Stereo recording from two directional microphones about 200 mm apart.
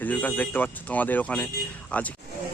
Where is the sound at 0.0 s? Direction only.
10° left (ahead or behind).